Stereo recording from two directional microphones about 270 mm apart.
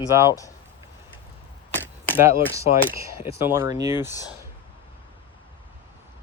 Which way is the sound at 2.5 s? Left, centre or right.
Centre.